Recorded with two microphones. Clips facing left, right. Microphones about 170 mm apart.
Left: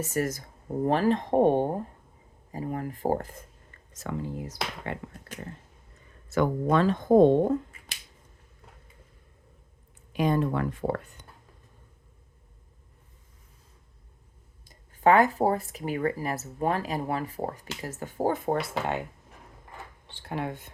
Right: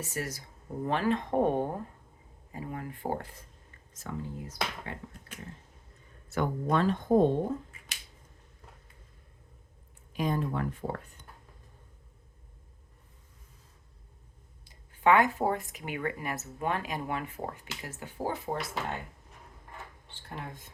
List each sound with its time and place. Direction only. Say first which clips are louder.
0.0 s speech: left 8 dB; 45° left (ahead or behind)
3.9 s speech: left 5 dB; 70° left (ahead or behind)
6.3 s speech: left 5 dB; 90° left
10.1 s speech: left 5 dB; 75° left (ahead or behind)
14.6 s speech: left 4 dB; 45° left (ahead or behind)
20.1 s speech: left 10 dB; 75° left (ahead or behind)